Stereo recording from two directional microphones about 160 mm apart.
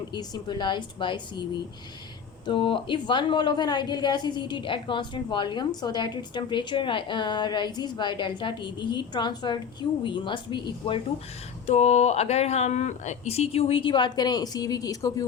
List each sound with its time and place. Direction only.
0.1 s a woman's voice: 25° left (ahead or behind)
2.5 s a woman's voice: 30° left (ahead or behind)
11.6 s speech: 45° left (ahead or behind); by 15.3 s 20° left (ahead or behind)